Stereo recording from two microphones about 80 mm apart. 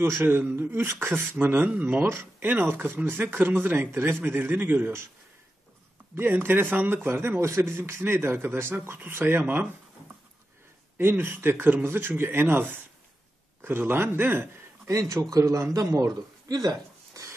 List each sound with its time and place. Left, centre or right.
0.2 s speech: right
2.0 s speech: right
6.1 s speech: right
11.0 s speech: right
14.9 s a man's voice: right